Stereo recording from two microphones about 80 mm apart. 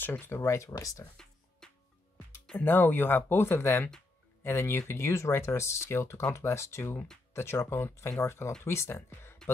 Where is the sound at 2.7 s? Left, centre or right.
Left.